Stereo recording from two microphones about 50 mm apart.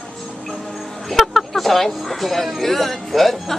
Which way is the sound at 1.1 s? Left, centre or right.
Centre.